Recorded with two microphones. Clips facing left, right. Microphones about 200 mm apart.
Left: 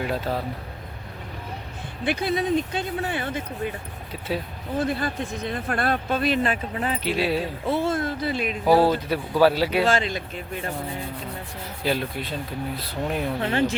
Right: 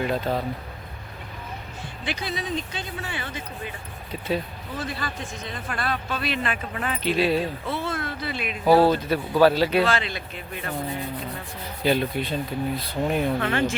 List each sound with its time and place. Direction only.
0.0 s speech: 5° left (ahead or behind)
2.0 s speech: 55° left (ahead or behind)
4.8 s speech: 55° left (ahead or behind); by 7.0 s 30° left (ahead or behind)
7.0 s speech: 10° left (ahead or behind)
7.7 s speech: 45° left (ahead or behind)
8.6 s speech: 10° left (ahead or behind)
9.8 s speech: 45° left (ahead or behind)
11.8 s speech: centre (ahead or behind)
13.4 s speech: 35° left (ahead or behind)